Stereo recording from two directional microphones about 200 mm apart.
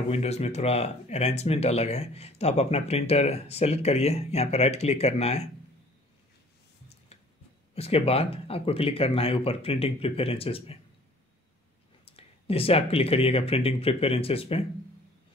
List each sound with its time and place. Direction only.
0.1 s speech: 30° left (ahead or behind)
7.7 s speech: 30° left (ahead or behind)
12.0 s speech: 30° left (ahead or behind)